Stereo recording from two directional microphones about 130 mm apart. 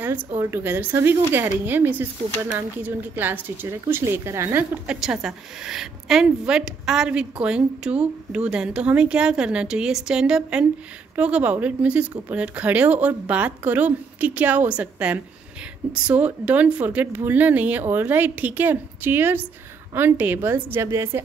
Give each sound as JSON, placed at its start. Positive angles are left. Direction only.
{"t": 0.4, "sound": "a woman's voice", "side_deg": -15}
{"t": 5.0, "sound": "a woman's voice", "side_deg": -5}